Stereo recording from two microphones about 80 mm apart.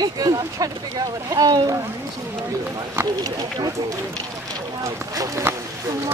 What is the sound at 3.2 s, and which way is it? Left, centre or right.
Speech, right.